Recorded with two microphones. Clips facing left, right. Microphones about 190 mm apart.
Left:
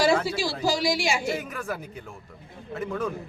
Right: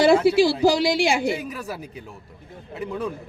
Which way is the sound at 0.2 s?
65° right (ahead or behind).